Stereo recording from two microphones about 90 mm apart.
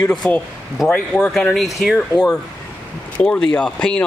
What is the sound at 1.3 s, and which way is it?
Speech, 5° left (ahead or behind).